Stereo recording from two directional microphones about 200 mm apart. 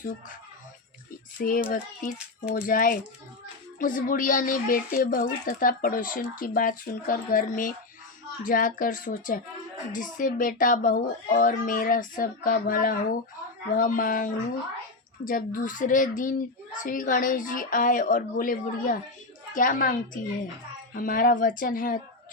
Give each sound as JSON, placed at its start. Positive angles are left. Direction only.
{"t": 1.4, "sound": "speech", "side_deg": 45}